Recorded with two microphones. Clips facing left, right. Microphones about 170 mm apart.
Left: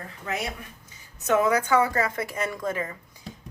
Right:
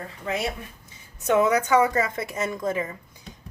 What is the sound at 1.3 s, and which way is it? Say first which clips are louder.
A woman's voice: right 2 dB; 20° right (ahead or behind).